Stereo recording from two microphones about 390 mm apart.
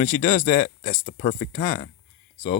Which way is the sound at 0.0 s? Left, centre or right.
Left.